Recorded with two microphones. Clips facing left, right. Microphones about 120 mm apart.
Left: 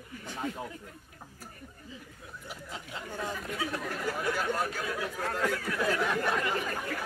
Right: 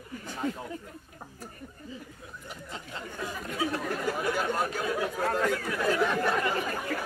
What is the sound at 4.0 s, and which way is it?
Speech, 15° right (ahead or behind).